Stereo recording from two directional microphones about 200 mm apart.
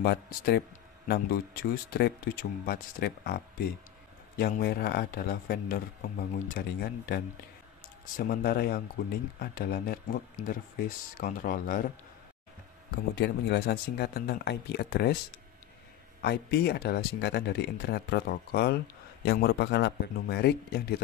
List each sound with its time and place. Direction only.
0.0 s speech: 55° left (ahead or behind)
12.9 s speech: 55° left (ahead or behind)
16.2 s speech: 55° left (ahead or behind)